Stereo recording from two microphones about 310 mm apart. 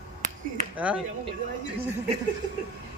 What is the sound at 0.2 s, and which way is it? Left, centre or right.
Music, right.